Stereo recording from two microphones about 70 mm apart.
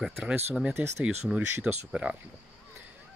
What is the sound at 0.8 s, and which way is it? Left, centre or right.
Speech, right.